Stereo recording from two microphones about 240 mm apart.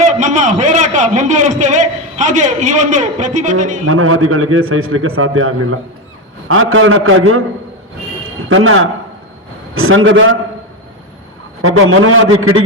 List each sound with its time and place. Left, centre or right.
0.0 s a man's voice: right
3.8 s a man's voice: right
8.4 s a man's voice: right
11.6 s a man's voice: right